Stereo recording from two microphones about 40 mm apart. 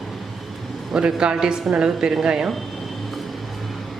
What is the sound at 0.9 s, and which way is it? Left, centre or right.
A woman's voice, centre.